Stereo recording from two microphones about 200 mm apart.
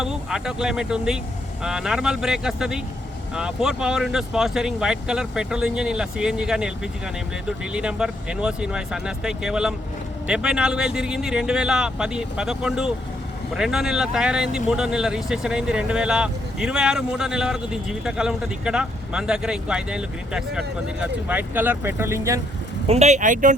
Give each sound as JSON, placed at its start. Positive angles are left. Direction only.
{"t": 0.0, "sound": "speech", "side_deg": -5}
{"t": 22.9, "sound": "speech", "side_deg": -35}